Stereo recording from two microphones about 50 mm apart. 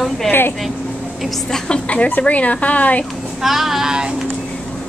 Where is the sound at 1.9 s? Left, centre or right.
Left.